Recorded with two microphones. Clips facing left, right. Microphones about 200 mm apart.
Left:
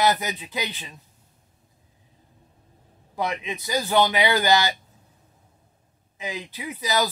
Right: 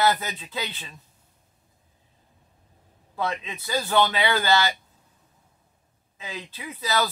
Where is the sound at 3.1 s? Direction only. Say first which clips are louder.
Left 1 dB; 15° left (ahead or behind).